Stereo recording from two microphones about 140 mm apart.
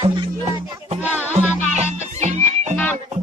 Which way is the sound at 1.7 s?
55° right (ahead or behind).